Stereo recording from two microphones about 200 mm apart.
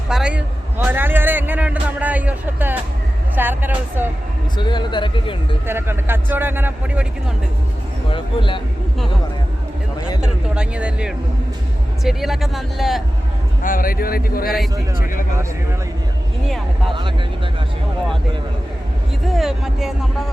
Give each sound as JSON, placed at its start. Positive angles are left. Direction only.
{"t": 0.1, "sound": "a sound", "side_deg": -5}
{"t": 3.3, "sound": "speech", "side_deg": -10}
{"t": 4.5, "sound": "speech", "side_deg": 20}
{"t": 5.6, "sound": "speech", "side_deg": -10}
{"t": 8.1, "sound": "speech", "side_deg": 25}
{"t": 10.2, "sound": "speech", "side_deg": -5}
{"t": 13.6, "sound": "speech", "side_deg": 45}
{"t": 16.9, "sound": "speech", "side_deg": -25}
{"t": 19.3, "sound": "speech", "side_deg": 0}